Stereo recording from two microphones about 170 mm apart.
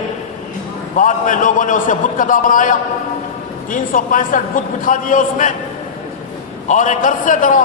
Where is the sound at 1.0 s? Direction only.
50° left (ahead or behind).